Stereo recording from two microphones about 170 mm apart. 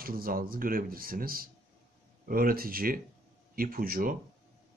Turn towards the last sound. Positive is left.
turn(degrees=-55)  # may be behind; listen again after turning